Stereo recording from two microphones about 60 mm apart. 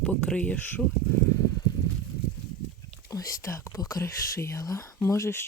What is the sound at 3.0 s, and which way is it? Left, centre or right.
Whispering, left.